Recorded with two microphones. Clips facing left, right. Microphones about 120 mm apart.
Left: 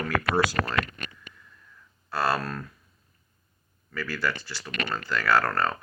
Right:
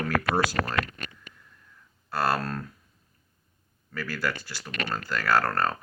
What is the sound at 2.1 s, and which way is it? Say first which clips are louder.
Speech: even; 45° right (ahead or behind).